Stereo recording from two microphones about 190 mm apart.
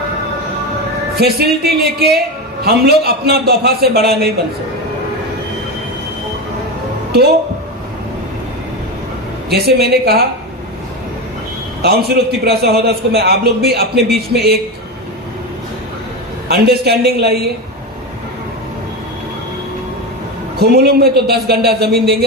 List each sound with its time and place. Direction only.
1.2 s a man's voice: 55° right (ahead or behind)
9.5 s a man's voice: 55° right (ahead or behind)
11.8 s a man's voice: 55° right (ahead or behind)
16.5 s a man's voice: 60° right (ahead or behind)
20.6 s a man's voice: 55° right (ahead or behind)